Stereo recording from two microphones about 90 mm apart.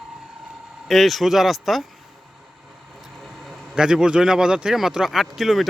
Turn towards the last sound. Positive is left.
turn(degrees=0)  # may be behind; listen again after turning